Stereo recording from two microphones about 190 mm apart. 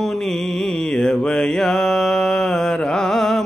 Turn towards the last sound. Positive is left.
turn(degrees=0)  # may be behind; listen again after turning